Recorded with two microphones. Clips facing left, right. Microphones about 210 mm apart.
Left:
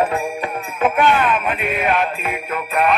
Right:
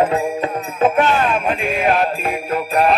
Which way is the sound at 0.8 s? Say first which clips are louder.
Right 1 dB; 40° right (ahead or behind).